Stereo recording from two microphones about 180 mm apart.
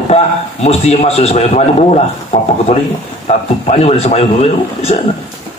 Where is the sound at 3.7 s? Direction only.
35° left (ahead or behind).